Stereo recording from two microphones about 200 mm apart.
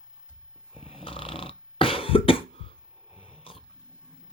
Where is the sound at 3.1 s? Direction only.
25° left (ahead or behind).